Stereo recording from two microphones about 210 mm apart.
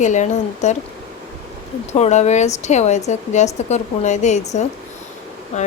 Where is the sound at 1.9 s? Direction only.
30° left (ahead or behind).